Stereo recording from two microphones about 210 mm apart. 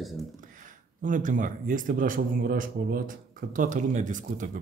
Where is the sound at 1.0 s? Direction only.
40° right (ahead or behind).